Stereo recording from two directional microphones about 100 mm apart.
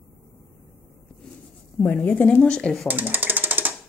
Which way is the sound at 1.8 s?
20° left (ahead or behind).